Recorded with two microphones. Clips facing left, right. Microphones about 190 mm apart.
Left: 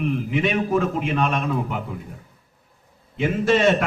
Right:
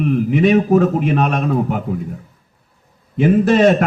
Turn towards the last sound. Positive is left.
turn(degrees=-45)  # may be behind; listen again after turning